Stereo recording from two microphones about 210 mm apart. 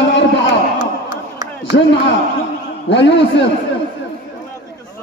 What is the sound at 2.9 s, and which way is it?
Speech, 60° left (ahead or behind).